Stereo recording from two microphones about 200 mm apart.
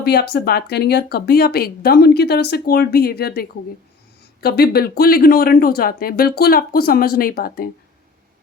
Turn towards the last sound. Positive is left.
turn(degrees=50)  # may be behind; listen again after turning